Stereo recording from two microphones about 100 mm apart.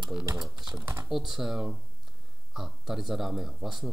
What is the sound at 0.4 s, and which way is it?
Speech, 5° right (ahead or behind).